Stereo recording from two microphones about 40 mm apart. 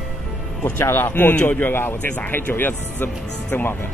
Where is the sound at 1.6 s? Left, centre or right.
Left.